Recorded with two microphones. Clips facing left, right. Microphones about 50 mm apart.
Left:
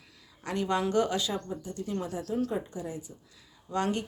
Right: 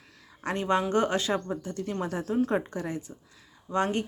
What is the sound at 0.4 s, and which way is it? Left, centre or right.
A woman's voice, right.